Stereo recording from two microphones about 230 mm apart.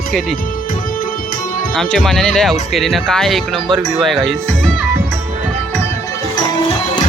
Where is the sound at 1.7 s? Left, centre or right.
Centre.